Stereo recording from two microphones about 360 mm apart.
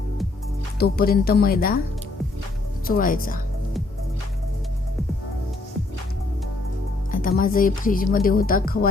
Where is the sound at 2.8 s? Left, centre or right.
Left.